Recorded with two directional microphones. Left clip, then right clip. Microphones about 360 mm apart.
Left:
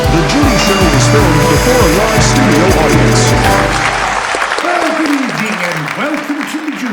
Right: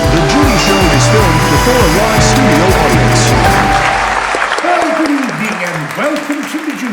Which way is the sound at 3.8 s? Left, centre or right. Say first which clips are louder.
Right 1 dB; centre.